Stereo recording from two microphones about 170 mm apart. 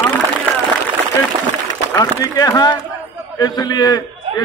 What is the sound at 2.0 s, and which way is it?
A man's voice, 20° left (ahead or behind).